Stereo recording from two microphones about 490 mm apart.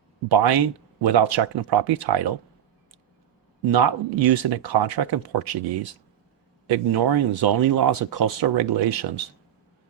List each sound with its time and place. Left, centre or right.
0.3 s speech: right
3.7 s speech: right
6.7 s speech: right